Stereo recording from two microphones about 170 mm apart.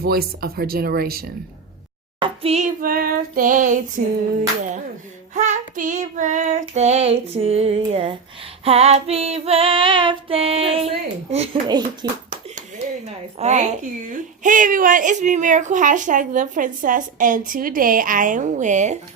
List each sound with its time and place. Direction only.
0.0 s speech: 65° right (ahead or behind)
2.1 s a sound: 35° right (ahead or behind)
2.8 s speech: 60° right (ahead or behind)
5.3 s a woman's voice: 45° right (ahead or behind)
7.9 s female singing: 35° right (ahead or behind)
12.0 s speech: 25° right (ahead or behind)
13.4 s a woman's voice: 40° right (ahead or behind)